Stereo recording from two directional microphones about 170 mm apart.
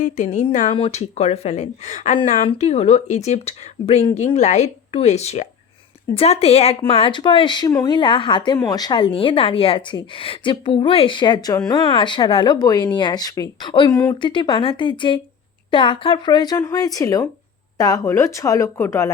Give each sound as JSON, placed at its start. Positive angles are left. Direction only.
{"t": 0.0, "sound": "speech", "side_deg": 45}
{"t": 14.2, "sound": "speech", "side_deg": 30}